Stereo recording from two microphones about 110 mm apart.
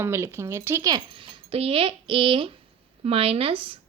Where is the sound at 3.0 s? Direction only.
60° right (ahead or behind).